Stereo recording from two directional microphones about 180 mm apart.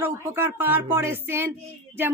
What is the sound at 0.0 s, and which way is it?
A woman's voice, 15° right (ahead or behind).